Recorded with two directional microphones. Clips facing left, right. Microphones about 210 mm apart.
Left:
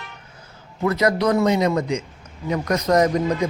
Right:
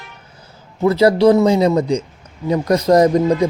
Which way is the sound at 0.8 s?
30° right (ahead or behind).